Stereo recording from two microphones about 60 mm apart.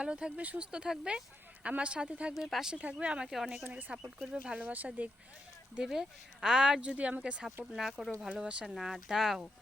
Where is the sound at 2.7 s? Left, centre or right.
Right.